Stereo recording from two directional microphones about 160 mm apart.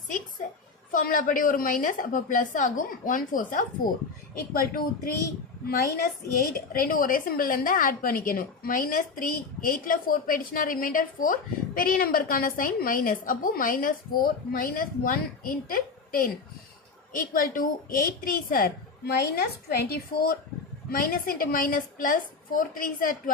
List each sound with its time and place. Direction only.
0.9 s a woman's voice: 55° left (ahead or behind)
5.6 s a woman's voice: 80° left
6.7 s a woman's voice: 60° left (ahead or behind)